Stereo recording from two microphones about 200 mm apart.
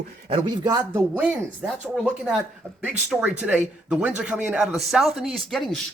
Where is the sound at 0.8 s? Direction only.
10° right (ahead or behind).